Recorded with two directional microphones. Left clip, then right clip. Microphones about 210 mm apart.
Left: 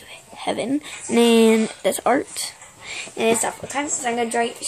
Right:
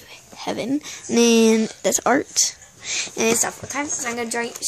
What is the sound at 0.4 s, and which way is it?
Speech, 35° right (ahead or behind).